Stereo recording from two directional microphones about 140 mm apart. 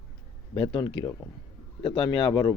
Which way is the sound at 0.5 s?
35° left (ahead or behind).